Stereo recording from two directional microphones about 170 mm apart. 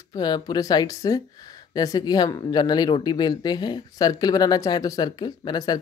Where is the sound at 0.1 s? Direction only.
25° left (ahead or behind).